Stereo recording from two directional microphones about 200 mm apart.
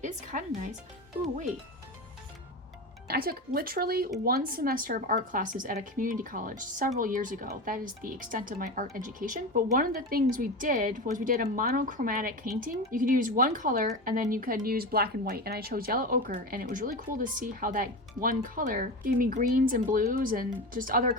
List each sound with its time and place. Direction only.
0.0 s speech: 40° right (ahead or behind)
3.1 s speech: 50° right (ahead or behind)